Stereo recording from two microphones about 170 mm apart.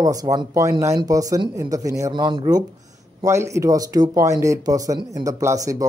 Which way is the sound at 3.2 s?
15° right (ahead or behind).